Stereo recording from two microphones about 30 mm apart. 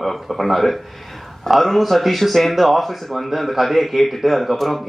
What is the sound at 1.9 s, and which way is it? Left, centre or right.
Speech, centre.